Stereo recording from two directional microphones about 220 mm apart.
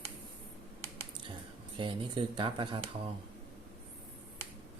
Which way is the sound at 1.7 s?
20° right (ahead or behind).